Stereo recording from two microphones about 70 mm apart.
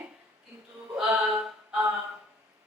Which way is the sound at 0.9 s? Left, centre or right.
Centre.